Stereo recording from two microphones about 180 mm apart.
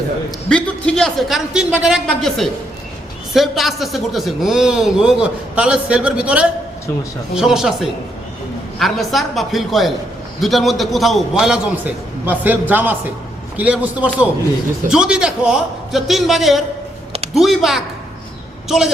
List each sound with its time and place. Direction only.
0.4 s a man's voice: 5° left (ahead or behind)